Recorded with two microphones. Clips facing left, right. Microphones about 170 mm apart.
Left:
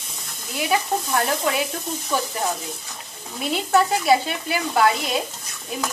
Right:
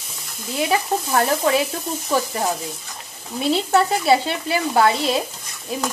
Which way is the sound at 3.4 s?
30° right (ahead or behind).